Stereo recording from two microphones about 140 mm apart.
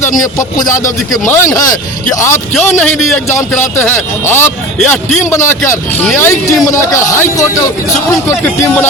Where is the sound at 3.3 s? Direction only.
15° left (ahead or behind).